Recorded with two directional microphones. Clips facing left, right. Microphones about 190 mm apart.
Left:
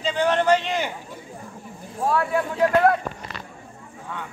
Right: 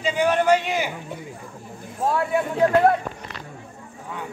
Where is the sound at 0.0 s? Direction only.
10° right (ahead or behind).